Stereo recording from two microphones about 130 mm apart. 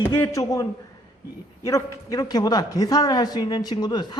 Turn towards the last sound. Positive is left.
turn(degrees=35)  # may be behind; listen again after turning